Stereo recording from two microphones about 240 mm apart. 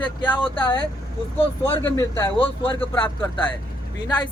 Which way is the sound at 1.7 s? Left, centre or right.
Centre.